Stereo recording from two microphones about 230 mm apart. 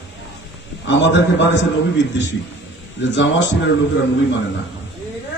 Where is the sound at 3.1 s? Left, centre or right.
Left.